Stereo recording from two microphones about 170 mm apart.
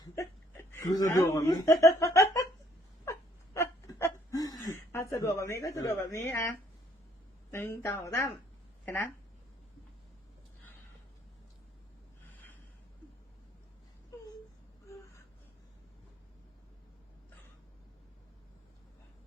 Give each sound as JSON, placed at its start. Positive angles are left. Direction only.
{"t": 0.0, "sound": "chuckle", "side_deg": 15}
{"t": 3.0, "sound": "a sound", "side_deg": 15}
{"t": 7.5, "sound": "speech", "side_deg": 10}